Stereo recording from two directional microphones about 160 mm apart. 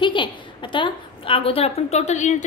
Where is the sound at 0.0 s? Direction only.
30° left (ahead or behind).